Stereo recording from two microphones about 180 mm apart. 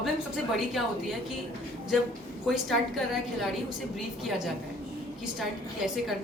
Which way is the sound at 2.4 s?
Centre (ahead or behind).